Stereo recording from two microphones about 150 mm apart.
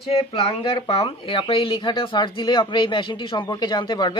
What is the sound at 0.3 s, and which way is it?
Speech, 40° left (ahead or behind).